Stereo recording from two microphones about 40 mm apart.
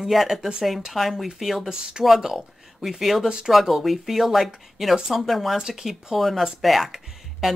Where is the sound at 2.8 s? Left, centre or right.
Centre.